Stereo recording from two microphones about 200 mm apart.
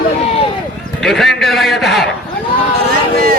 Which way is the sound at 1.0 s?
Centre (ahead or behind).